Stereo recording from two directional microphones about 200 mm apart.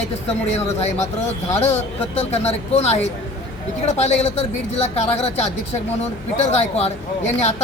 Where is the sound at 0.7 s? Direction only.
35° left (ahead or behind).